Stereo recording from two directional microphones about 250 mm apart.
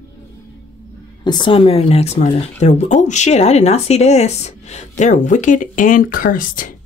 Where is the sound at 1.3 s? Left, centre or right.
Centre; by 6.7 s left.